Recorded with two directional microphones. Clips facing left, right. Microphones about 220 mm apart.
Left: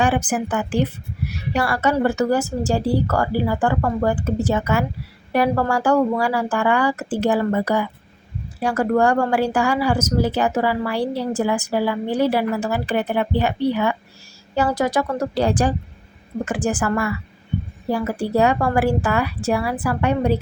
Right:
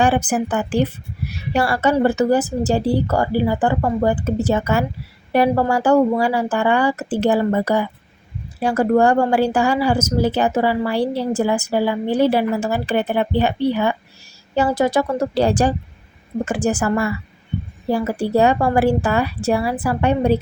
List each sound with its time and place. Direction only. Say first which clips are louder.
0.3 s a woman's voice: right 2 dB; 30° right (ahead or behind)